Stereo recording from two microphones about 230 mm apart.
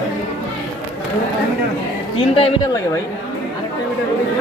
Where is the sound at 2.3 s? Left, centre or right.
Left.